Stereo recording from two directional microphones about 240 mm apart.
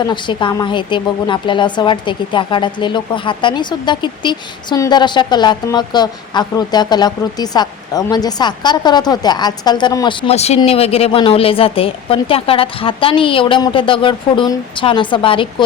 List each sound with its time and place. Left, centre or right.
0.0 s speech: centre